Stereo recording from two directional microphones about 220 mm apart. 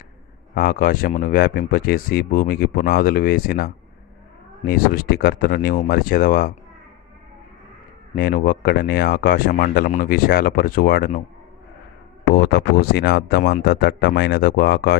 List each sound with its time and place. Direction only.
0.5 s speech: 40° left (ahead or behind)
8.1 s speech: 40° left (ahead or behind)
12.3 s speech: 45° left (ahead or behind)